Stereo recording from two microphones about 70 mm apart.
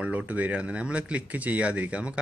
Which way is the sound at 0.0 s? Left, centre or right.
Centre.